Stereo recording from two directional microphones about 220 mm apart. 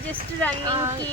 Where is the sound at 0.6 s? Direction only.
20° right (ahead or behind).